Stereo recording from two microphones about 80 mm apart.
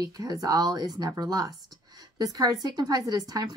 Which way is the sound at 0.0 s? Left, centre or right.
Right.